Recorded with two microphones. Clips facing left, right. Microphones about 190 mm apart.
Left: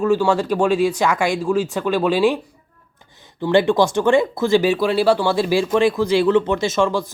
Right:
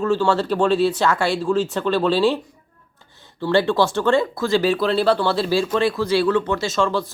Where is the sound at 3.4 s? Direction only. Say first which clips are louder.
Left 2 dB; 15° left (ahead or behind).